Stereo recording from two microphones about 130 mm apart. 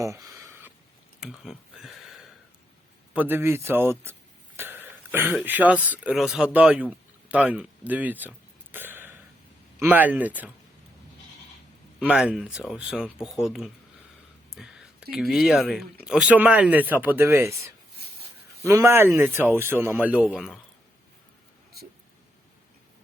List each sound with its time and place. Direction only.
0.0 s a sound: 25° right (ahead or behind)
1.2 s speech: 5° right (ahead or behind)
3.1 s speech: 15° right (ahead or behind)
6.5 s a sound: 10° right (ahead or behind)
9.7 s speech: 15° right (ahead or behind)
11.9 s speech: 5° right (ahead or behind)